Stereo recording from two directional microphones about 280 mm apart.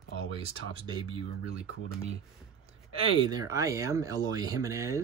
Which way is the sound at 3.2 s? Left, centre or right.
Centre.